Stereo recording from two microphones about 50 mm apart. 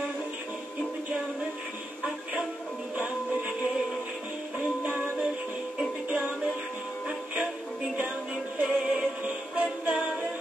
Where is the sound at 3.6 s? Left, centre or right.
Centre.